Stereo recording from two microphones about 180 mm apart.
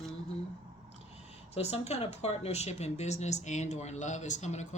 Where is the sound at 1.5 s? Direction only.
35° left (ahead or behind).